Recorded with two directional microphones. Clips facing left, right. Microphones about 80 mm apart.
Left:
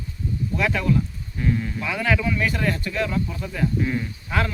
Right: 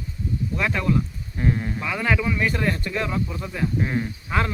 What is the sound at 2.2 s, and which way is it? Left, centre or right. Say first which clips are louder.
Speech: even; right.